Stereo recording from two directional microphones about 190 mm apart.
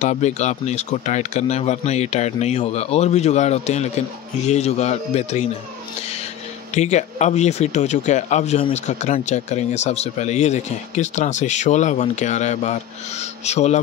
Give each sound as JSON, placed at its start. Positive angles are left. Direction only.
{"t": 0.0, "sound": "speech", "side_deg": 35}
{"t": 6.7, "sound": "speech", "side_deg": 40}